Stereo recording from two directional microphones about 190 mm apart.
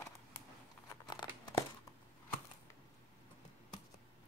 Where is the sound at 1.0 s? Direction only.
20° left (ahead or behind).